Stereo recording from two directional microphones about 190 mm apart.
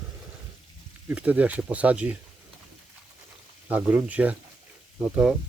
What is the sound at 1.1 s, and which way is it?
Speech, 5° right (ahead or behind).